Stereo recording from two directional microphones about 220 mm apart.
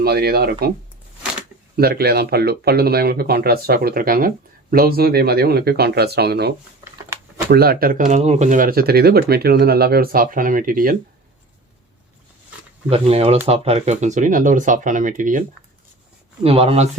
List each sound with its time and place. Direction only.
0.0 s speech: 45° right (ahead or behind)
1.7 s speech: 45° right (ahead or behind)
7.5 s speech: 45° right (ahead or behind)
12.9 s speech: 25° right (ahead or behind)
16.4 s speech: 25° right (ahead or behind)